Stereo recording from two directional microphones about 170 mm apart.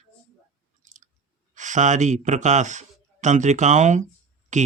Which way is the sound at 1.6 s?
45° right (ahead or behind).